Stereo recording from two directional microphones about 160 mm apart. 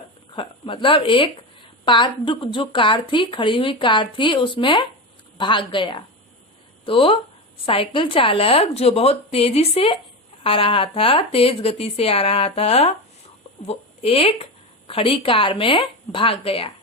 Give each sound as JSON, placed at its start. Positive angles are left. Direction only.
{"t": 0.3, "sound": "a woman's voice", "side_deg": 35}